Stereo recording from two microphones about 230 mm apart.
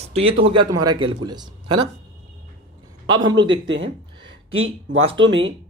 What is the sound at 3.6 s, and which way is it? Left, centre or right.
Speech, right.